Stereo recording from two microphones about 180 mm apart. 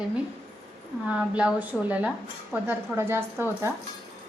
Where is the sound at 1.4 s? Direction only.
5° right (ahead or behind).